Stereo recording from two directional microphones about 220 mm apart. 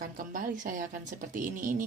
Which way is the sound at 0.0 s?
40° right (ahead or behind).